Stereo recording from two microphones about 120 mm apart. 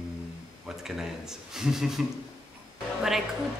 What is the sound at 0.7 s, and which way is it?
Speech, 5° right (ahead or behind).